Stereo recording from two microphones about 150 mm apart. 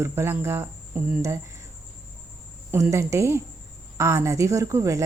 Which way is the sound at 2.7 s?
15° right (ahead or behind).